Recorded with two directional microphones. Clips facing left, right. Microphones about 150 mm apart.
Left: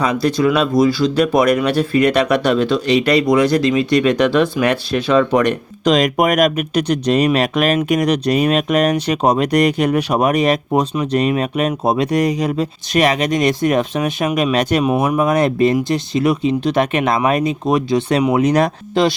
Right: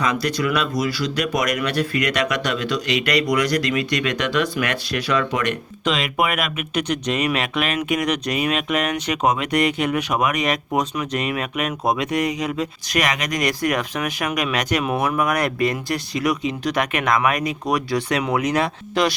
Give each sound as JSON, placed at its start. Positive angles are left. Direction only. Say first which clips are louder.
{"t": 0.0, "sound": "speech", "louder": "left 6 dB", "side_deg": 25}
{"t": 18.4, "sound": "speech", "louder": "left 6 dB", "side_deg": 40}
{"t": 19.0, "sound": "speech", "louder": "left 5 dB", "side_deg": 25}